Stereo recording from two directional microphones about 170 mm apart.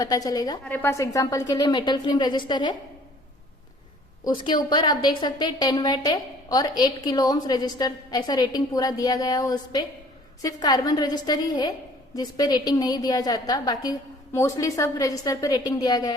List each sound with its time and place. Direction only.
0.0 s a woman's voice: 20° left (ahead or behind)
4.2 s a woman's voice: 25° left (ahead or behind)